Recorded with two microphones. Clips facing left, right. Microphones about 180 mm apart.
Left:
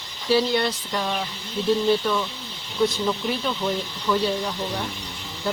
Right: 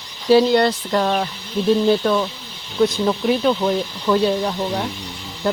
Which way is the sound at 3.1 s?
60° right (ahead or behind).